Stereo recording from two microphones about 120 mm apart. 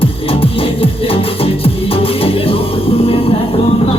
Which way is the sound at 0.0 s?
50° left (ahead or behind).